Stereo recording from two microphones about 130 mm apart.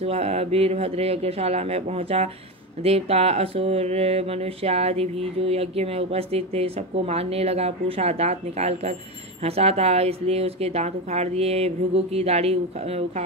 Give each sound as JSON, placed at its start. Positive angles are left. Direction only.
{"t": 0.0, "sound": "speech", "side_deg": -50}